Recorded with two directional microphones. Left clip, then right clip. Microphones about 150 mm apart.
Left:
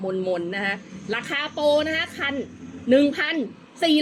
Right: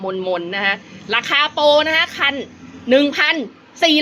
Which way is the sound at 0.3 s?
20° left (ahead or behind).